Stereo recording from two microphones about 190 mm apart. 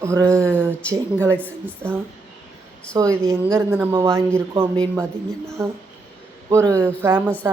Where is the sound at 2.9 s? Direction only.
20° right (ahead or behind).